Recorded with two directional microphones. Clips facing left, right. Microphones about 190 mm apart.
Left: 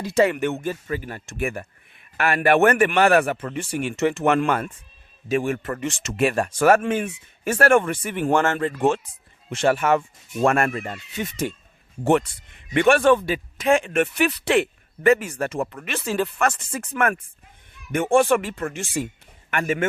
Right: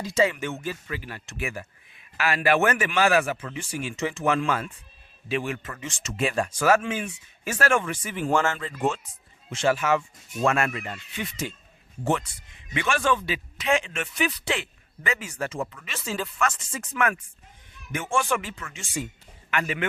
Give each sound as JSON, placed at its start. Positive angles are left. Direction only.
{"t": 0.0, "sound": "speech", "side_deg": 60}
{"t": 12.0, "sound": "speech", "side_deg": 60}
{"t": 19.5, "sound": "speech", "side_deg": 50}